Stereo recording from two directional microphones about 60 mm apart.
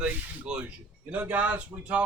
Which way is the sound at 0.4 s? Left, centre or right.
Centre.